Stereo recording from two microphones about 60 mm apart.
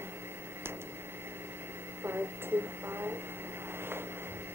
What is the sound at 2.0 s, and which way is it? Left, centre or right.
Speech, right.